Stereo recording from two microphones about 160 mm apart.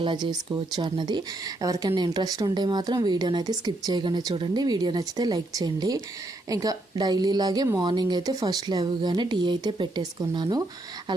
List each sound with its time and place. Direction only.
0.0 s a woman's voice: 30° right (ahead or behind)